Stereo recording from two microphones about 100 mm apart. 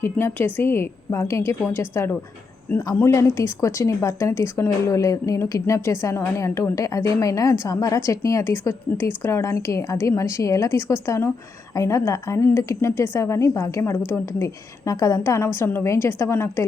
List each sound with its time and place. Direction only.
0.0 s a woman's voice: 25° left (ahead or behind)